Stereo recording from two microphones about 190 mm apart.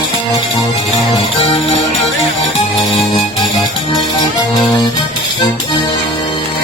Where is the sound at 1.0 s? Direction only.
30° left (ahead or behind).